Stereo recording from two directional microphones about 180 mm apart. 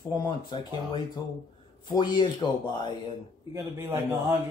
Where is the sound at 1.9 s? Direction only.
25° left (ahead or behind).